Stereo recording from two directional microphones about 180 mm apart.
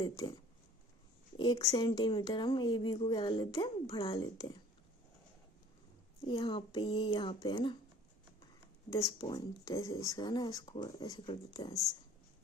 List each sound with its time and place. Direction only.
0.0 s speech: 25° left (ahead or behind)
1.4 s speech: 20° left (ahead or behind)
6.2 s speech: 25° left (ahead or behind)
8.9 s speech: 20° left (ahead or behind)